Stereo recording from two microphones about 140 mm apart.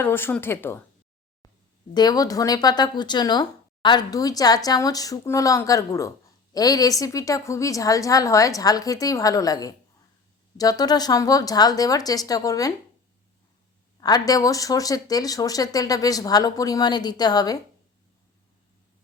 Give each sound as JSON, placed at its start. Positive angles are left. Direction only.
{"t": 0.0, "sound": "speech", "side_deg": 15}
{"t": 1.9, "sound": "speech", "side_deg": 30}
{"t": 14.0, "sound": "speech", "side_deg": 25}